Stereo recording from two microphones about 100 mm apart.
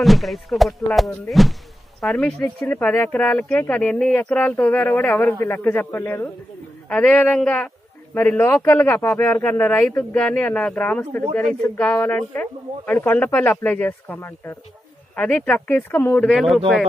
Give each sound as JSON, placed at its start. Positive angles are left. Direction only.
{"t": 0.0, "sound": "speech", "side_deg": 0}
{"t": 15.1, "sound": "speech", "side_deg": 15}
{"t": 16.2, "sound": "speech", "side_deg": 0}